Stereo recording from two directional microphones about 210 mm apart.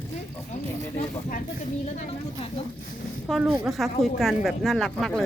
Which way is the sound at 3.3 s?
Centre (ahead or behind).